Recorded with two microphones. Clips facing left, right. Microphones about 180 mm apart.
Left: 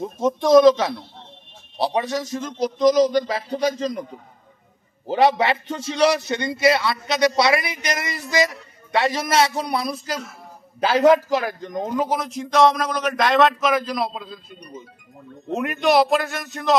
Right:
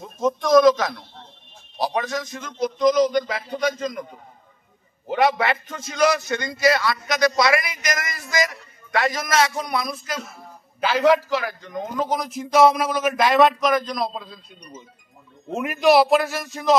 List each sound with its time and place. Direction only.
0.0 s a man's voice: 30° left (ahead or behind)
5.0 s a man's voice: 30° left (ahead or behind)
10.8 s speech: 40° left (ahead or behind)
12.0 s speech: 5° left (ahead or behind)
15.5 s speech: centre (ahead or behind)